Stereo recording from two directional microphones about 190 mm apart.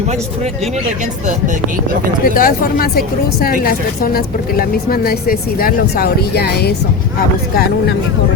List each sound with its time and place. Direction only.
2.2 s a woman's voice: 50° left (ahead or behind)